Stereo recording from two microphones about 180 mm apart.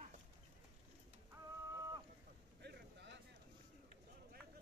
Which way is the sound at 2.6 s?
70° right (ahead or behind).